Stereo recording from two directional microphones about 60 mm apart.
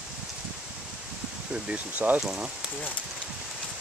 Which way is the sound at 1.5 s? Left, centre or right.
Centre.